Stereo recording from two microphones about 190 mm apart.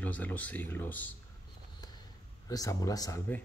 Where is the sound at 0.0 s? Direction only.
10° left (ahead or behind).